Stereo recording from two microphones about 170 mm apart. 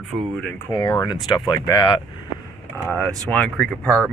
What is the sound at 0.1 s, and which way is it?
Speech, 15° right (ahead or behind).